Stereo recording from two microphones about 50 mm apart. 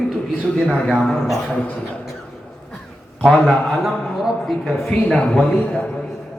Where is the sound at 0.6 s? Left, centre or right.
Centre.